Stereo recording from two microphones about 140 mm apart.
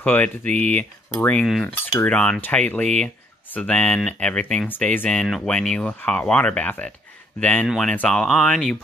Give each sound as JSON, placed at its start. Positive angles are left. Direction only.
{"t": 0.0, "sound": "speech", "side_deg": 10}
{"t": 7.6, "sound": "speech", "side_deg": 0}